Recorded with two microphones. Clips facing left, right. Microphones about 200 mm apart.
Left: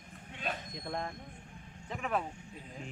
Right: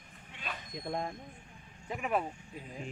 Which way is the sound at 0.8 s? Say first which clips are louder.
Right 2 dB; 15° right (ahead or behind).